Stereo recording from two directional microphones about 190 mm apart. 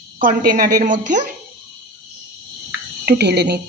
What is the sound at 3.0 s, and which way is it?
Speech, 60° right (ahead or behind).